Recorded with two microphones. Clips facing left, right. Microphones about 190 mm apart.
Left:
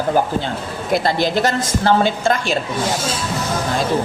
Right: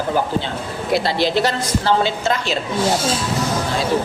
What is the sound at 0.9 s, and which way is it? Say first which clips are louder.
Speech: even; 50° left (ahead or behind).